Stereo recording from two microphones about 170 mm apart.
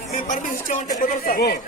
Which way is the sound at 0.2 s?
50° left (ahead or behind).